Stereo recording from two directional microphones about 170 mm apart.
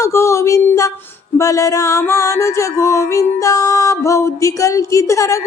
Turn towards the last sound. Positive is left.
turn(degrees=20)  # may be behind; listen again after turning